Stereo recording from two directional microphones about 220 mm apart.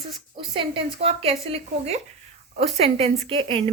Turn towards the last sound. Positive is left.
turn(degrees=-25)  # may be behind; listen again after turning